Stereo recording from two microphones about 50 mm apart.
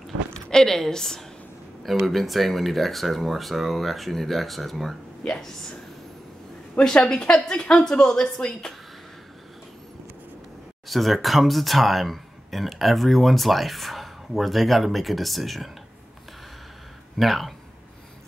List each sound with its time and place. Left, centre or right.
0.3 s a woman's voice: centre
5.2 s a woman's voice: centre
6.8 s a woman's voice: centre
10.9 s speech: centre
17.2 s speech: centre